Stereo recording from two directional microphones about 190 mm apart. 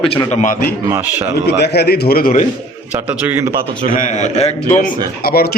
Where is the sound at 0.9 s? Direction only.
10° right (ahead or behind).